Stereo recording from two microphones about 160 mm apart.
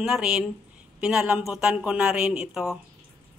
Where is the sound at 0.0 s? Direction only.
5° right (ahead or behind).